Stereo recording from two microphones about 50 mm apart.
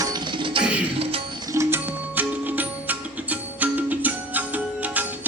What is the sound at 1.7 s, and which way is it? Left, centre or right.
Music, right.